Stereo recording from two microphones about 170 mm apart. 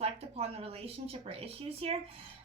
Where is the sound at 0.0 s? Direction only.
35° right (ahead or behind).